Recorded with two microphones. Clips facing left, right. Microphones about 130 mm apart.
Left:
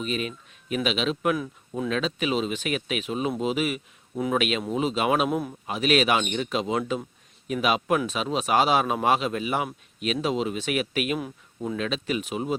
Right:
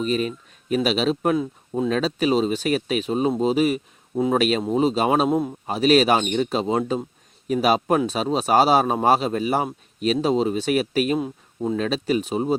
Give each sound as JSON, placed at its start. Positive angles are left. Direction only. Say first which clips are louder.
{"t": 0.0, "sound": "speech", "louder": "right 6 dB", "side_deg": -40}
{"t": 1.9, "sound": "speech", "louder": "right 5 dB", "side_deg": -40}